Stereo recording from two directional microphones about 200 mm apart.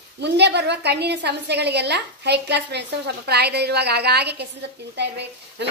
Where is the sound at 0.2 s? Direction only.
60° right (ahead or behind).